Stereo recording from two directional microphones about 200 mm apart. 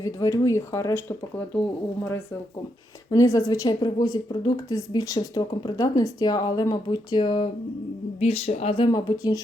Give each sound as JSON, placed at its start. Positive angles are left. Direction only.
{"t": 0.0, "sound": "speech", "side_deg": 15}
{"t": 1.5, "sound": "speech", "side_deg": 5}
{"t": 3.1, "sound": "speech", "side_deg": 15}